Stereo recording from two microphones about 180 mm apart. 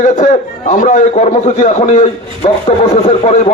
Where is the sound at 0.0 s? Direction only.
45° left (ahead or behind).